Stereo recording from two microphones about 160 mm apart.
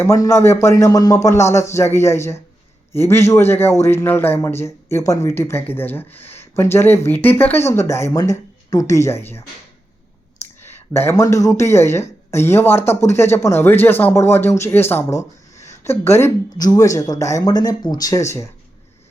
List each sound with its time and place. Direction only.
0.0 s a man's voice: 15° left (ahead or behind)
10.7 s a man's voice: 15° left (ahead or behind)